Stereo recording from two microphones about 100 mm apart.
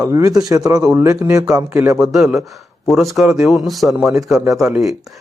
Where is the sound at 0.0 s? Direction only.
35° right (ahead or behind).